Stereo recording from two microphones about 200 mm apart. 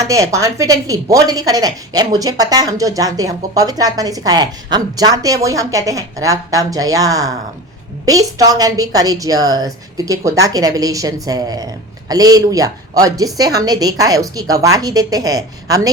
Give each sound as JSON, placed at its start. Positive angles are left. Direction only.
{"t": 0.0, "sound": "a woman's voice", "side_deg": -15}